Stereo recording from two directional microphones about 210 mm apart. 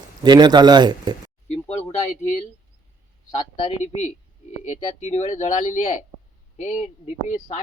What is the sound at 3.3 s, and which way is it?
Speech, 25° left (ahead or behind).